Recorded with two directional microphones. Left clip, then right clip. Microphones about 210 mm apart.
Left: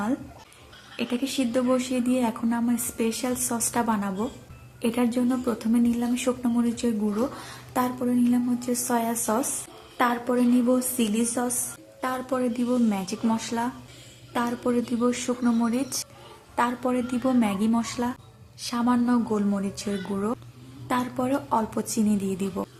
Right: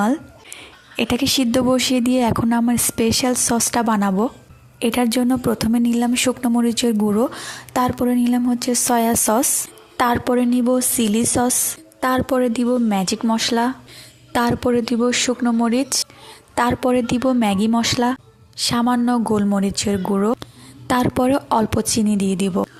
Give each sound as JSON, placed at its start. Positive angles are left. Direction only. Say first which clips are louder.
{"t": 0.9, "sound": "a woman's voice", "louder": "right 9 dB", "side_deg": -50}